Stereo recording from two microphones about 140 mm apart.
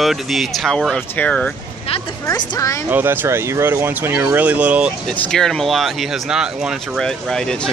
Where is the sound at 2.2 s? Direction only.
25° left (ahead or behind).